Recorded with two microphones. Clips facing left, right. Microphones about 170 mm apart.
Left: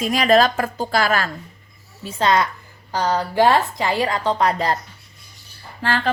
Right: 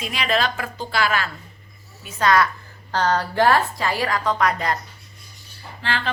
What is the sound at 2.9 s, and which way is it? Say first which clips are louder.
A woman's voice: left 1 dB; 10° left (ahead or behind).